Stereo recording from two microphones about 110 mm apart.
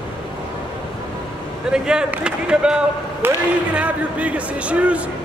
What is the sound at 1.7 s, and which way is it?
A man's voice, 5° right (ahead or behind).